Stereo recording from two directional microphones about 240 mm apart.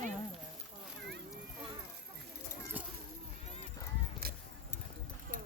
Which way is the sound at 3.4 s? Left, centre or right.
Left.